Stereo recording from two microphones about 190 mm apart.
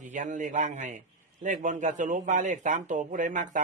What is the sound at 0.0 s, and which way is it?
A man's voice, 40° right (ahead or behind).